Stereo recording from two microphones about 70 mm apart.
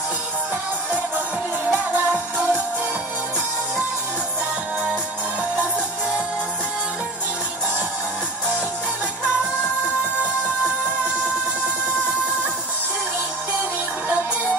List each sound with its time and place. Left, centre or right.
1.7 s music: right